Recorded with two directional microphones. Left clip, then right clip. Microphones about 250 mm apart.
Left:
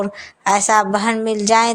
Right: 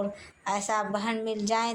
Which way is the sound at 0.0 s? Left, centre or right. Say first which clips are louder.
Left 12 dB; left.